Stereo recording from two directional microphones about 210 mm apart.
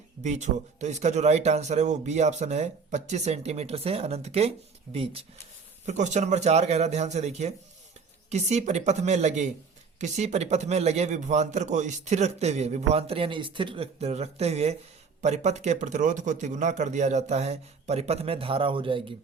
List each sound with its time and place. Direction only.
0.2 s a man's voice: 35° right (ahead or behind)